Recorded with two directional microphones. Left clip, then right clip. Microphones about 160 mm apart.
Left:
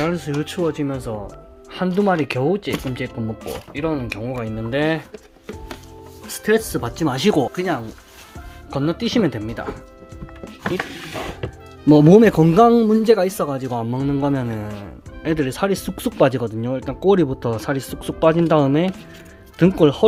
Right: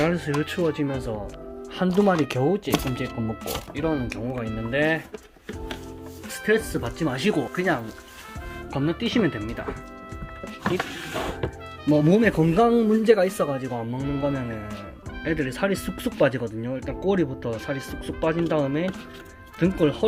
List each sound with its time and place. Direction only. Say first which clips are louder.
0.0 s speech: left 1 dB; 5° left (ahead or behind)
0.3 s speech: left 2 dB; 15° left (ahead or behind)
1.7 s speech: left 3 dB; 5° right (ahead or behind); by 4.4 s 10° left (ahead or behind)
4.4 s speech: left 2 dB; 25° left (ahead or behind)
6.4 s speech: left 4 dB; 30° left (ahead or behind)
7.5 s speech: left 2 dB; 5° left (ahead or behind)
8.7 s speech: left 4 dB; 25° left (ahead or behind)
12.0 s speech: left 8 dB; 40° left (ahead or behind); by 13.6 s 15° left (ahead or behind)
13.6 s speech: left 6 dB; 30° left (ahead or behind)